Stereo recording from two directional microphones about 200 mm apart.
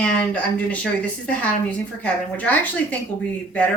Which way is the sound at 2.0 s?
5° left (ahead or behind).